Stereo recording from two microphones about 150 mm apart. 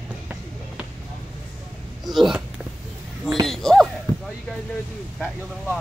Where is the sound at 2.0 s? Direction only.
Centre (ahead or behind).